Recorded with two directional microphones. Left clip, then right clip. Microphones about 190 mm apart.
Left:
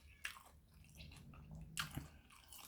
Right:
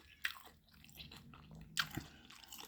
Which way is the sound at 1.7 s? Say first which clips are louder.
Right 7 dB; 25° right (ahead or behind).